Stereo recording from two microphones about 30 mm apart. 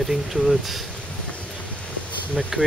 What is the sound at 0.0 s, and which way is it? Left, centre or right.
Speech, centre.